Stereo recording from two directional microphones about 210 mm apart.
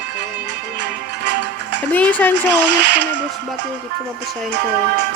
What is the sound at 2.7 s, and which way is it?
Speech, 55° right (ahead or behind).